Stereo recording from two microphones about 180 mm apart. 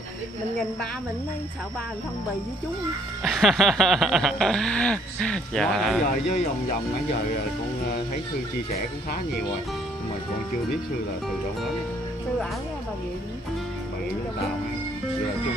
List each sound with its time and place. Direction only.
3.3 s snicker: centre (ahead or behind)
6.0 s speech: 50° left (ahead or behind)